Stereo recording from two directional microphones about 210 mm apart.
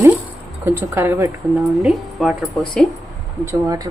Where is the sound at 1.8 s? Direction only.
Centre (ahead or behind).